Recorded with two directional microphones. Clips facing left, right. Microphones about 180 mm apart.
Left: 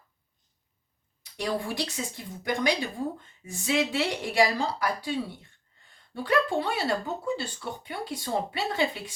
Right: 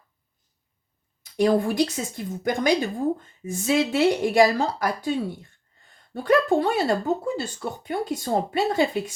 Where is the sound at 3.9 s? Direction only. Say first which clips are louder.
Right 7 dB; 45° right (ahead or behind).